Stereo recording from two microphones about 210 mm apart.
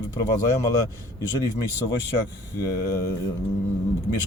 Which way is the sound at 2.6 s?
15° left (ahead or behind).